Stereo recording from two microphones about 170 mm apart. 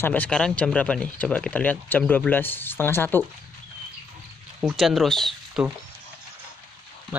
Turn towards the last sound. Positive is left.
turn(degrees=0)  # may be behind; listen again after turning